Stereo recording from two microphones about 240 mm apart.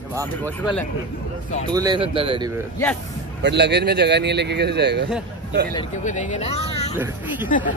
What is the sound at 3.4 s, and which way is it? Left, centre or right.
Speech, right.